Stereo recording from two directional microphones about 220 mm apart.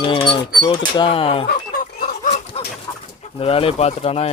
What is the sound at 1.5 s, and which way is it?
Chicken, 40° left (ahead or behind).